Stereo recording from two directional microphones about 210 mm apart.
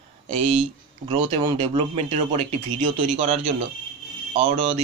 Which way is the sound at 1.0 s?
20° right (ahead or behind).